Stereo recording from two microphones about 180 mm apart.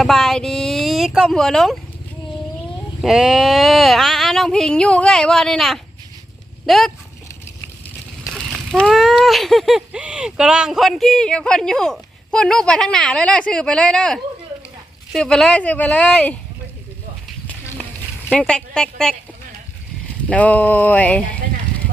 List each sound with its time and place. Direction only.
0.0 s speech: centre (ahead or behind)
3.0 s speech: 5° right (ahead or behind)
8.3 s speech: centre (ahead or behind)
17.4 s a sound: 10° left (ahead or behind)
18.3 s speech: 5° left (ahead or behind)
20.2 s speech: 10° left (ahead or behind)